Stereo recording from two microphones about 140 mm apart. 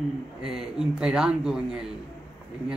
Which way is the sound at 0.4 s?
5° right (ahead or behind).